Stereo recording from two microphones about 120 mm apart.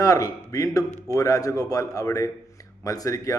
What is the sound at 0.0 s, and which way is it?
A man's voice, 30° left (ahead or behind).